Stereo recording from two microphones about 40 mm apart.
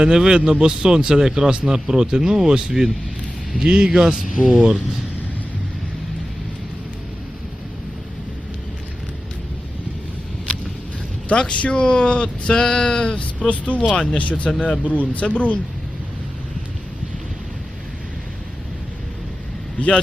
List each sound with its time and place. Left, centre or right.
0.0 s a man's voice: centre
3.9 s a man's voice: centre
11.3 s speech: left
13.1 s speech: left